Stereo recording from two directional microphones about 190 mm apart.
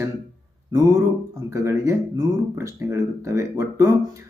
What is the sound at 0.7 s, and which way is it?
Speech, 15° right (ahead or behind).